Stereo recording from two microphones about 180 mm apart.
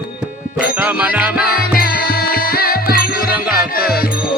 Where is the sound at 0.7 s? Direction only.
10° right (ahead or behind).